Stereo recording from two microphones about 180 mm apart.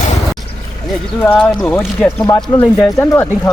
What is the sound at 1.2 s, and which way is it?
Speech, 5° left (ahead or behind).